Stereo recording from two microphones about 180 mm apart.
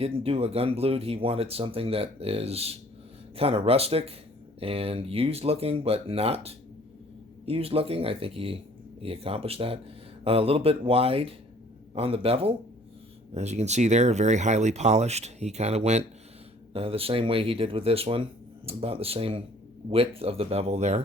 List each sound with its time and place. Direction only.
0.0 s speech: 30° right (ahead or behind)